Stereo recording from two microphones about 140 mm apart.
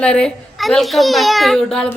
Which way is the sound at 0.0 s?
5° left (ahead or behind).